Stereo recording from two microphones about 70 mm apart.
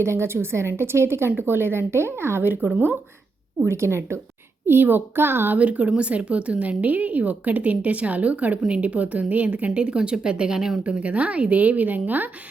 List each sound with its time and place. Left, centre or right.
0.0 s speech: right
3.7 s speech: right
5.5 s a woman's voice: right
10.8 s a woman's voice: centre